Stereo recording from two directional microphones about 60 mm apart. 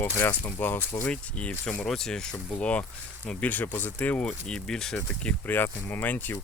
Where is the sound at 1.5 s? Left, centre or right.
Left.